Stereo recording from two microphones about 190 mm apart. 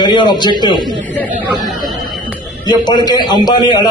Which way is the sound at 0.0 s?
25° left (ahead or behind).